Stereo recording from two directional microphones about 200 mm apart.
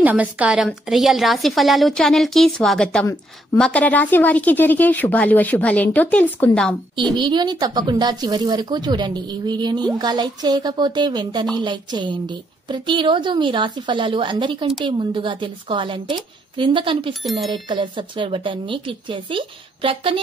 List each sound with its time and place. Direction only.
0.0 s a woman's voice: 5° right (ahead or behind)
7.2 s a woman's voice: 20° right (ahead or behind)
17.1 s a woman's voice: centre (ahead or behind)
17.5 s a woman's voice: 25° right (ahead or behind)